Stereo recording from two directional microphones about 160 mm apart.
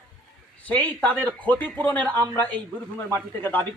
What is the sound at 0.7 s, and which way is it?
A man's voice, 10° left (ahead or behind).